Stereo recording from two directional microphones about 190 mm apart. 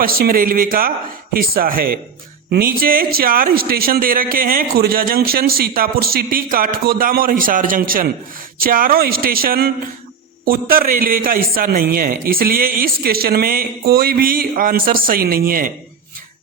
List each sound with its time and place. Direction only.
0.0 s speech: 50° right (ahead or behind)